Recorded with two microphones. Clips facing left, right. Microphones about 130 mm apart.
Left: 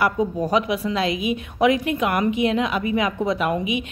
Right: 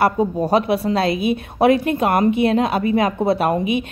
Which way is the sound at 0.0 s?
35° right (ahead or behind).